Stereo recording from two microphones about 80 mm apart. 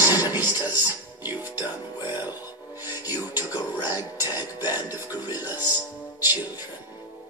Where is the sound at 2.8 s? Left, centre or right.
Right.